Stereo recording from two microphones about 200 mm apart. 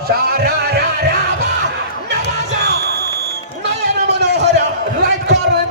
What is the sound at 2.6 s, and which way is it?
Smoke detector, 55° right (ahead or behind).